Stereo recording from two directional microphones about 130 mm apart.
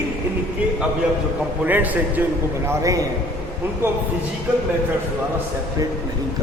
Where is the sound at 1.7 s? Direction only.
15° right (ahead or behind).